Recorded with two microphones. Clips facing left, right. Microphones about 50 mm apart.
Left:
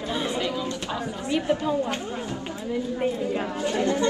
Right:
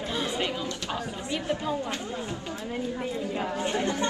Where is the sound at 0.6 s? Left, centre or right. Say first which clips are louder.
Left 3 dB; left.